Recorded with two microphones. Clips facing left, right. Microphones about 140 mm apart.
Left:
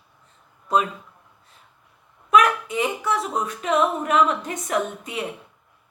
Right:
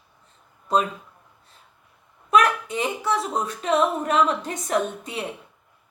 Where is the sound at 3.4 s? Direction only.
30° right (ahead or behind).